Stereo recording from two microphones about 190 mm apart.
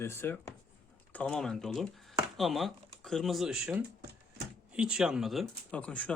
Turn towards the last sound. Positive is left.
turn(degrees=5)  # may be behind; listen again after turning